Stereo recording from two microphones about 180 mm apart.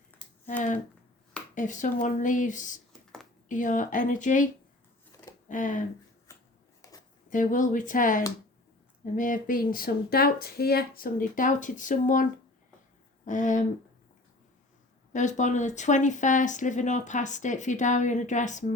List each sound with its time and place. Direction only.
0.1 s a sound: 10° left (ahead or behind)
1.5 s speech: 45° left (ahead or behind)
5.5 s speech: 45° left (ahead or behind)
6.8 s a sound: 20° left (ahead or behind)
7.3 s speech: 45° left (ahead or behind)
15.1 s speech: 40° left (ahead or behind)